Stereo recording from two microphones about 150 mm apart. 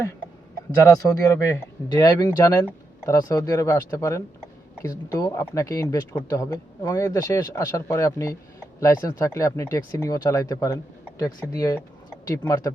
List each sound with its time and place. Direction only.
0.9 s speech: 20° left (ahead or behind)